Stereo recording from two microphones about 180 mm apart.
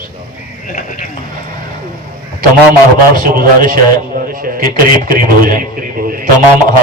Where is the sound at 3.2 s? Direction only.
50° right (ahead or behind).